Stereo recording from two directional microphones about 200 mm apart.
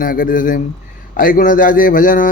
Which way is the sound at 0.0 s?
45° left (ahead or behind).